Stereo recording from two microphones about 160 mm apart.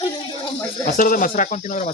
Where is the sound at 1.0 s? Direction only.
55° left (ahead or behind).